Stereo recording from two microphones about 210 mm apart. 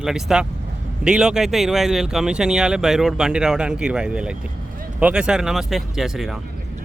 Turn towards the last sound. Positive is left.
turn(degrees=0)  # may be behind; listen again after turning